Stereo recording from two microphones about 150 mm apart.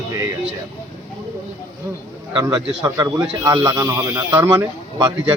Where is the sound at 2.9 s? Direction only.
20° right (ahead or behind).